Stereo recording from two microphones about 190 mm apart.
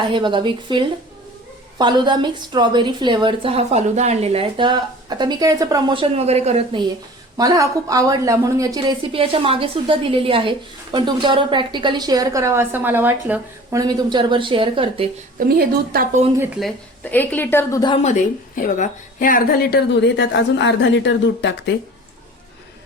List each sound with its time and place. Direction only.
0.0 s a woman's voice: 25° right (ahead or behind)
7.3 s a woman's voice: 20° right (ahead or behind)
13.7 s a woman's voice: 20° right (ahead or behind)
15.4 s a woman's voice: 50° right (ahead or behind)
16.6 s a woman's voice: 5° left (ahead or behind)
17.9 s speech: 35° left (ahead or behind); by 21.8 s 65° left (ahead or behind)